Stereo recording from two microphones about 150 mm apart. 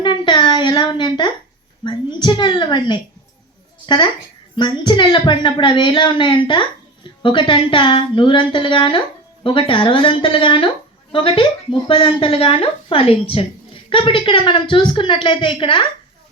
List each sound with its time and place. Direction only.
0.0 s a sound: 30° left (ahead or behind)
1.8 s a woman's voice: 30° left (ahead or behind)
4.5 s a woman's voice: 30° left (ahead or behind)